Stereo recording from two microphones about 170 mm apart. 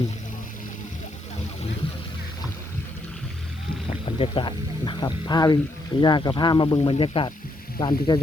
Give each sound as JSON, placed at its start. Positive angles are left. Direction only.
{"t": 3.8, "sound": "speech", "side_deg": 30}